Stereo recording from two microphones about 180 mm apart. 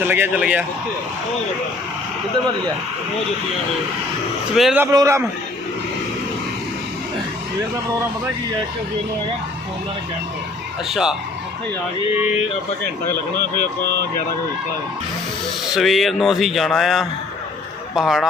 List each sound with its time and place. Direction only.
0.0 s a man's voice: 10° right (ahead or behind)
4.5 s speech: centre (ahead or behind)
4.8 s a man's voice: 15° right (ahead or behind)
10.8 s speech: centre (ahead or behind)
15.7 s speech: centre (ahead or behind)